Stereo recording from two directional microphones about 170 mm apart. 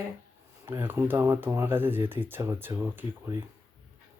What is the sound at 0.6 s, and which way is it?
Speech, 15° right (ahead or behind).